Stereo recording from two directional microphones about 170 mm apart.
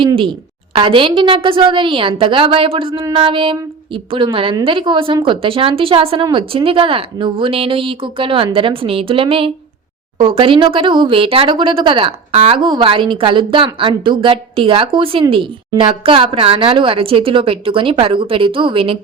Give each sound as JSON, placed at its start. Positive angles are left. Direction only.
{"t": 0.7, "sound": "speech", "side_deg": -30}